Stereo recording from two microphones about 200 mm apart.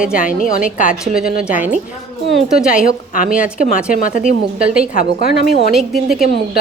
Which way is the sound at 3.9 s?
40° left (ahead or behind).